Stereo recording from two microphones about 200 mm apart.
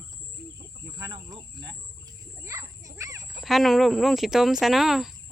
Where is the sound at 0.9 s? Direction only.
20° right (ahead or behind).